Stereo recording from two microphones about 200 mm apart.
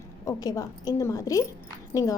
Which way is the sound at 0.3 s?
15° left (ahead or behind).